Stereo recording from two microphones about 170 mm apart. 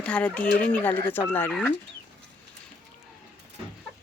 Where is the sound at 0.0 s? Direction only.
5° left (ahead or behind).